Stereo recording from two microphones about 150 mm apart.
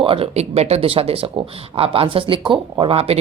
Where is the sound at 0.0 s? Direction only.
40° right (ahead or behind).